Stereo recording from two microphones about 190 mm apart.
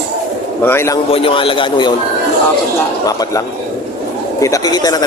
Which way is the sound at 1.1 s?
30° left (ahead or behind).